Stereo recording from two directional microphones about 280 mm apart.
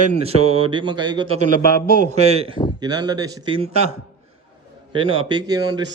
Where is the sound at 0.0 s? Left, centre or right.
Right.